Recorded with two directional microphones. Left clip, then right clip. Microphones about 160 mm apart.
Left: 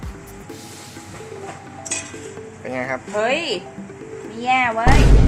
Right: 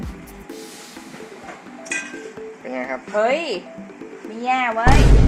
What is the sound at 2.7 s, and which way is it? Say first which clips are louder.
Speech: left 2 dB; 5° left (ahead or behind).